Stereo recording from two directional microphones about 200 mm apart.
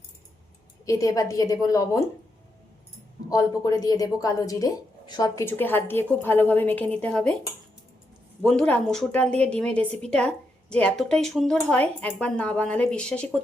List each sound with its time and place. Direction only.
0.9 s a woman's voice: 15° left (ahead or behind)
3.2 s a woman's voice: 15° left (ahead or behind)
8.4 s a woman's voice: 5° left (ahead or behind)